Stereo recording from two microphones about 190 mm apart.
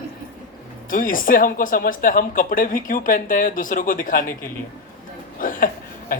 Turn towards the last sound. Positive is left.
turn(degrees=50)  # may be behind; listen again after turning